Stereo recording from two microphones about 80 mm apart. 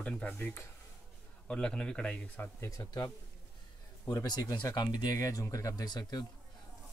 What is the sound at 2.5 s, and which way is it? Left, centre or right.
Speech, left.